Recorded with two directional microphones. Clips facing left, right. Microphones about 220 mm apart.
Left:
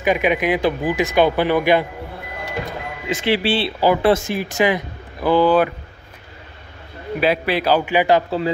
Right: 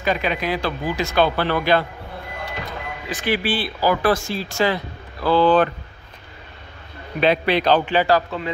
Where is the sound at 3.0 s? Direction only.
25° left (ahead or behind).